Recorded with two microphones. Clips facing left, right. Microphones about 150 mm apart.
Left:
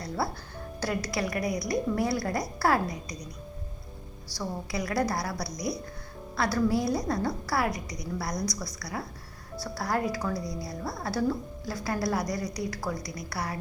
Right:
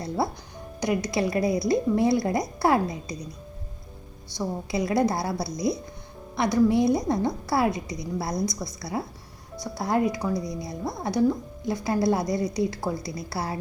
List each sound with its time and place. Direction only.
0.8 s a woman's voice: 20° right (ahead or behind)
4.3 s a woman's voice: 25° right (ahead or behind)